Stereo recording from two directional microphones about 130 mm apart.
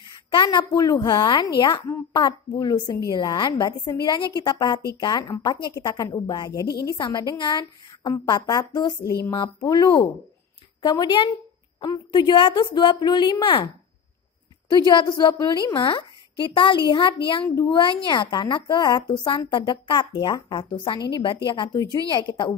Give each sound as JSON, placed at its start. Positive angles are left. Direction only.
{"t": 0.0, "sound": "a woman's voice", "side_deg": 35}
{"t": 14.9, "sound": "a woman's voice", "side_deg": 35}